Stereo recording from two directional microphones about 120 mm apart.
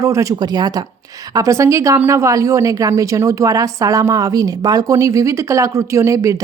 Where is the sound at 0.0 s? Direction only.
25° right (ahead or behind).